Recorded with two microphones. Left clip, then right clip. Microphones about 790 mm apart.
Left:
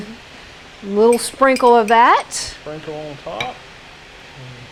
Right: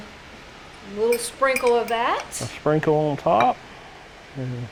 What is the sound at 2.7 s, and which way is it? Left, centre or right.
Speech, right.